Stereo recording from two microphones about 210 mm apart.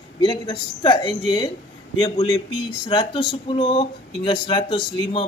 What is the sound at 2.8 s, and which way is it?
Speech, 25° left (ahead or behind).